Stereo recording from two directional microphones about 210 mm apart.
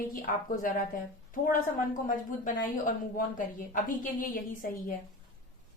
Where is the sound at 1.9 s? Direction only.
40° left (ahead or behind).